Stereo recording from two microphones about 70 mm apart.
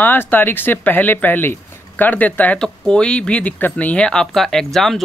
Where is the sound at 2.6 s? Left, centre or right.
Centre.